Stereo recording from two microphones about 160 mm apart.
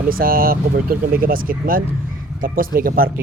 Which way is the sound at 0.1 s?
65° right (ahead or behind).